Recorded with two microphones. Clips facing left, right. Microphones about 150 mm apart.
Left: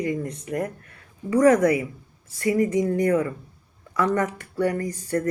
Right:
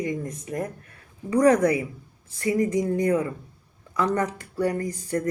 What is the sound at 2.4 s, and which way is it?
Speech, 30° right (ahead or behind).